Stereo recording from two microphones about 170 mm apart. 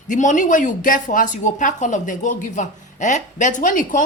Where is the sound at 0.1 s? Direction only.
50° left (ahead or behind).